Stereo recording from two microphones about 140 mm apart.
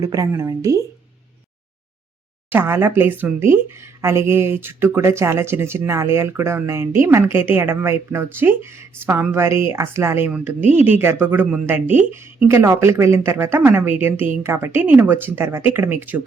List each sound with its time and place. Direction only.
0.0 s speech: 25° right (ahead or behind)
2.5 s speech: 15° right (ahead or behind)